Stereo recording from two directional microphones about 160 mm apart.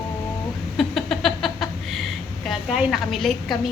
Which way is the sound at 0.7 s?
Centre (ahead or behind).